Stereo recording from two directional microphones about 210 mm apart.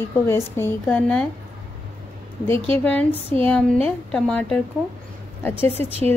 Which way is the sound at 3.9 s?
Centre (ahead or behind).